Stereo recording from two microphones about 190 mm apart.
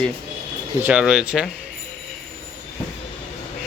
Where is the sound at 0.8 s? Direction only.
5° right (ahead or behind).